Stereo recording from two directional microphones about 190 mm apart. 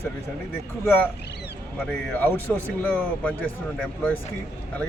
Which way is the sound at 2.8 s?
10° left (ahead or behind).